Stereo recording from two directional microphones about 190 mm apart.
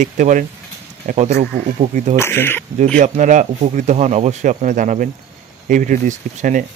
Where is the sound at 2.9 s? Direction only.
40° right (ahead or behind).